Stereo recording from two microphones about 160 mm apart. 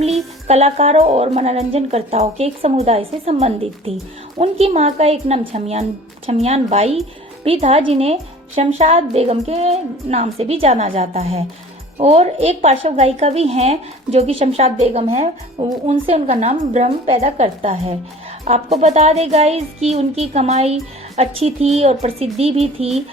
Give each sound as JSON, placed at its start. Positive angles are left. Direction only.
{"t": 0.0, "sound": "speech", "side_deg": -40}